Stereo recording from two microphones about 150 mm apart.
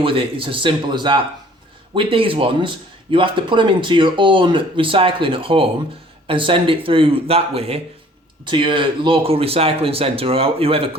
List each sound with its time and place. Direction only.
0.0 s speech: 35° right (ahead or behind)